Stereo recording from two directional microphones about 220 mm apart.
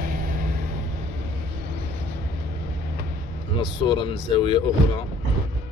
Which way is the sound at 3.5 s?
20° left (ahead or behind).